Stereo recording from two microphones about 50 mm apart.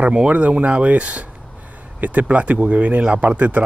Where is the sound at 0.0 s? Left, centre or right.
Right.